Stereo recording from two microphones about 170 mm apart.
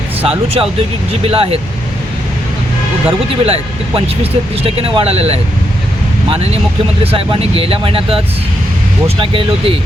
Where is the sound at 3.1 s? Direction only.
35° right (ahead or behind).